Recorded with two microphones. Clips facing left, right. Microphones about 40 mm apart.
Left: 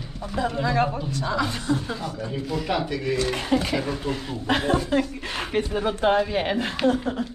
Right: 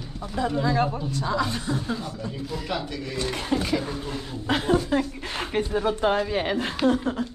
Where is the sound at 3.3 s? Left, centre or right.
Left.